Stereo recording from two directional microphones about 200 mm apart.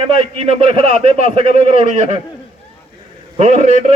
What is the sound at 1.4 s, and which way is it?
Speech, 45° left (ahead or behind).